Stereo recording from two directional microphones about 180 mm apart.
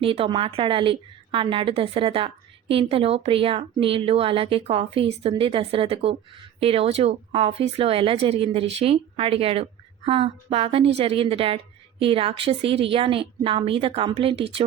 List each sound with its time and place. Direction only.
0.0 s a woman's voice: 30° right (ahead or behind)